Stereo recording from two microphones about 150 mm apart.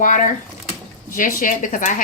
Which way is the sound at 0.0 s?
60° left (ahead or behind).